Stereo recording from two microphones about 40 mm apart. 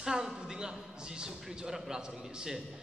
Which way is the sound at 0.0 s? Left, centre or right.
Centre.